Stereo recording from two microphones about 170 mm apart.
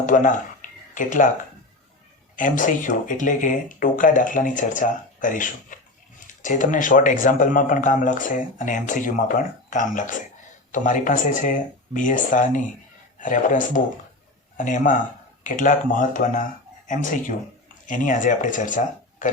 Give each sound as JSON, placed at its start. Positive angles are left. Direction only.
{"t": 0.0, "sound": "speech", "side_deg": 50}
{"t": 0.6, "sound": "a sound", "side_deg": 50}
{"t": 0.9, "sound": "speech", "side_deg": 50}
{"t": 2.3, "sound": "speech", "side_deg": 50}